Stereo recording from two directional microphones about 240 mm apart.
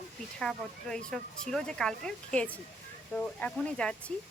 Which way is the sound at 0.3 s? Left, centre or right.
Centre.